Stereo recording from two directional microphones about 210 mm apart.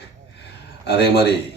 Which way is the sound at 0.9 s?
50° left (ahead or behind).